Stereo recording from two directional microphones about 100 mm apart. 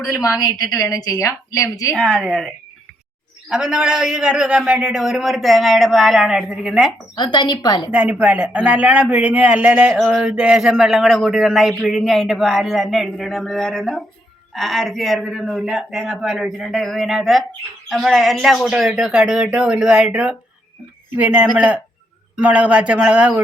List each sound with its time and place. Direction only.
0.1 s a woman's voice: 35° left (ahead or behind)
2.0 s speech: centre (ahead or behind)
3.5 s speech: 5° right (ahead or behind)
7.2 s speech: 45° left (ahead or behind)
7.9 s a man's voice: 15° right (ahead or behind)
21.4 s a man's voice: 5° right (ahead or behind)